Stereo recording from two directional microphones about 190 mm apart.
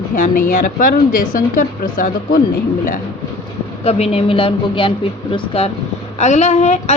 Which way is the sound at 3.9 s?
30° left (ahead or behind).